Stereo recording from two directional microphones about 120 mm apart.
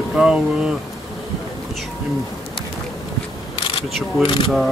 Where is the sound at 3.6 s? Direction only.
45° left (ahead or behind).